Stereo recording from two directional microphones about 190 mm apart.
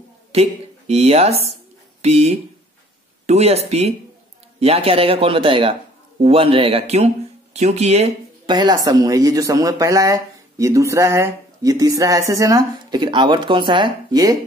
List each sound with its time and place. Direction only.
0.3 s speech: 35° right (ahead or behind)
8.5 s speech: 25° right (ahead or behind)